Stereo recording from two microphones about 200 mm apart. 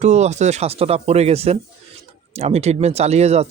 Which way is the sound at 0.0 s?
35° right (ahead or behind).